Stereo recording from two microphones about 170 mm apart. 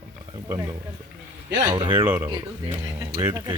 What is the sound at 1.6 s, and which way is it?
Speech, 30° right (ahead or behind).